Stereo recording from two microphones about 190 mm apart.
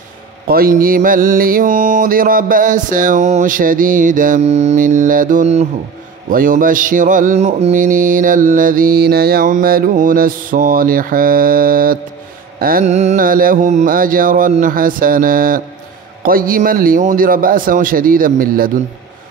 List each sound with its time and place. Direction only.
0.5 s mantra: 50° right (ahead or behind)